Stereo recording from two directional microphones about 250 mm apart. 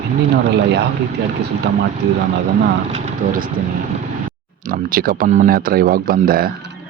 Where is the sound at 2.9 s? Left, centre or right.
Right.